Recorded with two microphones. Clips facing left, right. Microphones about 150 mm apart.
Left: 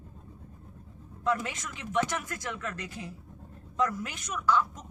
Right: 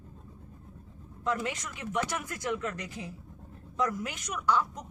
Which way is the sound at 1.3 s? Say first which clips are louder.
Left 1 dB; 15° right (ahead or behind).